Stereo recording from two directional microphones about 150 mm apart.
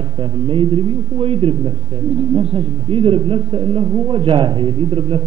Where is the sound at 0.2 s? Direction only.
35° right (ahead or behind).